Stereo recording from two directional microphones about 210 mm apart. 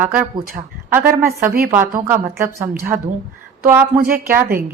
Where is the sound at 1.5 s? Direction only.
45° right (ahead or behind).